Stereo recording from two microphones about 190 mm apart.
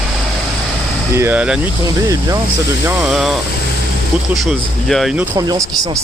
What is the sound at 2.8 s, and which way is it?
Speech, centre (ahead or behind).